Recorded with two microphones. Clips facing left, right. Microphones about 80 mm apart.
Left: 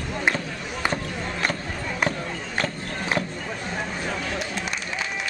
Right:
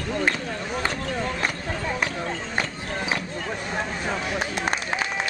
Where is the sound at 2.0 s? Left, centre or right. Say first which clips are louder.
Left 1 dB; centre.